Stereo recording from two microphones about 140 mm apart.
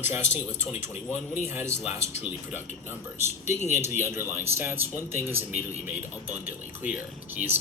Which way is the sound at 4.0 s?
15° right (ahead or behind).